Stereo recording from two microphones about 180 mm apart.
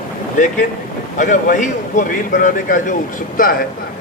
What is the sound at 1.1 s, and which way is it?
A man's voice, 45° left (ahead or behind).